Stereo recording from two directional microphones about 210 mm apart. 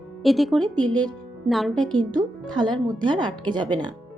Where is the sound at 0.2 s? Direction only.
Centre (ahead or behind).